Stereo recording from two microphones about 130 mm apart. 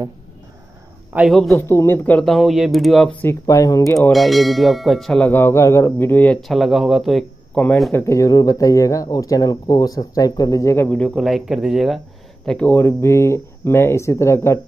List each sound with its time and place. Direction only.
1.3 s speech: centre (ahead or behind)
1.6 s speech: 20° left (ahead or behind); by 3.1 s centre (ahead or behind)
3.1 s speech: 15° left (ahead or behind)
4.1 s speech: centre (ahead or behind)
5.3 s speech: 20° left (ahead or behind); by 7.6 s centre (ahead or behind)
7.9 s speech: 20° left (ahead or behind)
11.1 s speech: centre (ahead or behind)
12.4 s speech: 10° left (ahead or behind)